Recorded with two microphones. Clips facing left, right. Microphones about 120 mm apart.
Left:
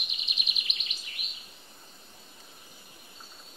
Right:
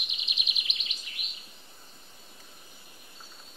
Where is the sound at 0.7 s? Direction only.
45° left (ahead or behind).